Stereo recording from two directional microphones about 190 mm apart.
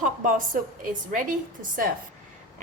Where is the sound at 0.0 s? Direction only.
45° right (ahead or behind).